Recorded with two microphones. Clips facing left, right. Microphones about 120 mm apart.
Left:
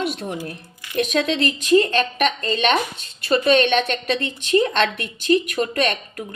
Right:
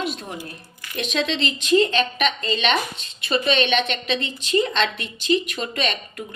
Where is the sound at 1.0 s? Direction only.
50° left (ahead or behind).